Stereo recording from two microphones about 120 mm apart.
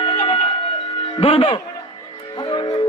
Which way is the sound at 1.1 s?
50° left (ahead or behind).